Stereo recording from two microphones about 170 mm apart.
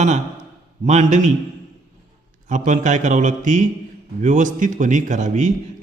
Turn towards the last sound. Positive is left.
turn(degrees=-45)  # may be behind; listen again after turning